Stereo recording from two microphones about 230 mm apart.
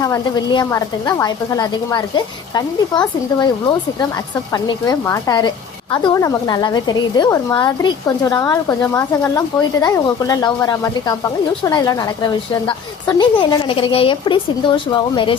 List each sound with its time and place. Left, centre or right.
0.0 s a woman's voice: centre
4.5 s a woman's voice: centre